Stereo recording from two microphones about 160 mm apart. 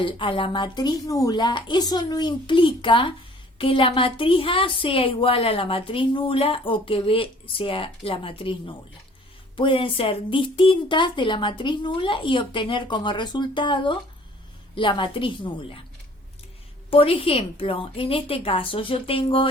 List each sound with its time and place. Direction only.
0.0 s a woman's voice: 30° left (ahead or behind)
16.9 s a woman's voice: 35° left (ahead or behind)